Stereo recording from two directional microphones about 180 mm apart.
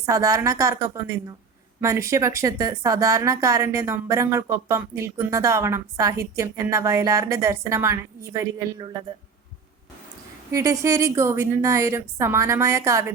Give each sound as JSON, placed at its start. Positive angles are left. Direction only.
{"t": 0.0, "sound": "a woman's voice", "side_deg": -15}
{"t": 10.5, "sound": "a woman's voice", "side_deg": -15}